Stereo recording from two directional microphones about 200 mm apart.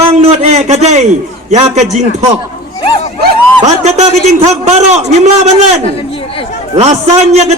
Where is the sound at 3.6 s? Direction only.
35° right (ahead or behind).